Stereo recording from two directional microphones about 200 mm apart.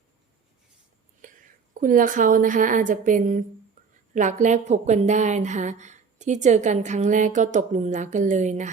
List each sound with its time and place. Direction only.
1.8 s a woman's voice: 40° right (ahead or behind)